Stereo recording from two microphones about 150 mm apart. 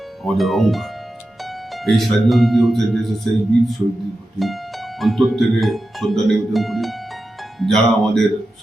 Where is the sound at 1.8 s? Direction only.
Centre (ahead or behind).